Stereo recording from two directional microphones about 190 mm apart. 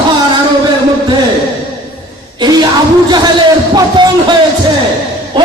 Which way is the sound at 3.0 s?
20° right (ahead or behind).